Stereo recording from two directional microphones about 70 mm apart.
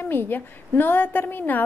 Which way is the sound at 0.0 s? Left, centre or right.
Left.